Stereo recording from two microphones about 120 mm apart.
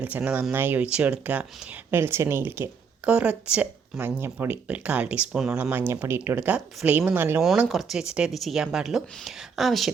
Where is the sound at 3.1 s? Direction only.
10° right (ahead or behind).